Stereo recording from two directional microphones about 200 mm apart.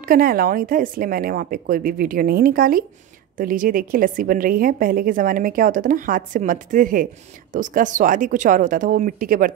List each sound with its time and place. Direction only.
0.0 s a woman's voice: 45° right (ahead or behind)